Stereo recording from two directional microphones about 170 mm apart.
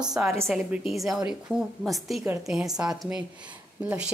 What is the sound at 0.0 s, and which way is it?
A woman's voice, 5° right (ahead or behind).